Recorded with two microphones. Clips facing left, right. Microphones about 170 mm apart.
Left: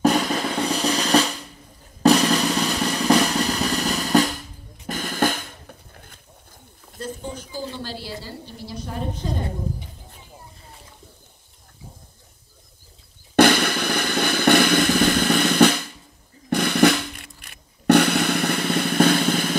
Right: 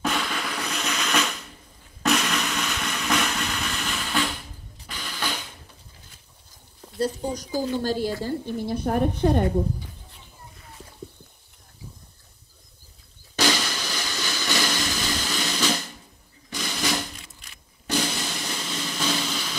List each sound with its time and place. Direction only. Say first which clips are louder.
0.0 s drum roll: left 8 dB; 40° left (ahead or behind)
2.0 s drum: left 8 dB; 35° left (ahead or behind); by 6.1 s 55° left (ahead or behind)
7.0 s a woman's voice: right 6 dB; 40° right (ahead or behind); by 9.5 s 60° right (ahead or behind)
13.4 s drum: left 9 dB; 60° left (ahead or behind)